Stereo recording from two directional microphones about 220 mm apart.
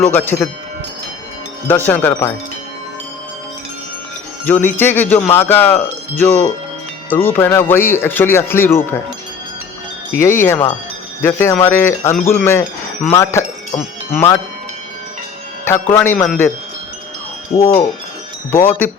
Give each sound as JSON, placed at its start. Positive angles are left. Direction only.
{"t": 0.0, "sound": "speech", "side_deg": 10}
{"t": 1.6, "sound": "speech", "side_deg": 10}
{"t": 4.4, "sound": "speech", "side_deg": 10}
{"t": 10.2, "sound": "speech", "side_deg": 10}
{"t": 15.6, "sound": "speech", "side_deg": 10}
{"t": 17.5, "sound": "wind chime", "side_deg": 25}
{"t": 18.5, "sound": "speech", "side_deg": 10}